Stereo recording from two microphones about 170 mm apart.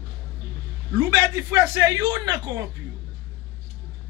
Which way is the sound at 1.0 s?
20° right (ahead or behind).